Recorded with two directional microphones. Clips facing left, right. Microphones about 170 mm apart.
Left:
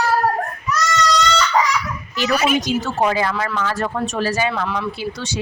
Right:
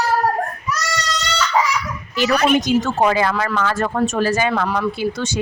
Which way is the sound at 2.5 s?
55° right (ahead or behind).